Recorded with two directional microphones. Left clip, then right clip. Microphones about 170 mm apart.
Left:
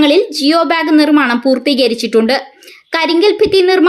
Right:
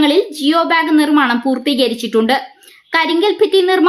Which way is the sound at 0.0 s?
15° left (ahead or behind).